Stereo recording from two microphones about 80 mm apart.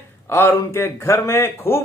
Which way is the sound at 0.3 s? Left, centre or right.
Left.